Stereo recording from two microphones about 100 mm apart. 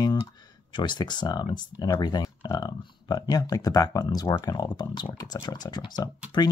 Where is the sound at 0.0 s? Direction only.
40° left (ahead or behind).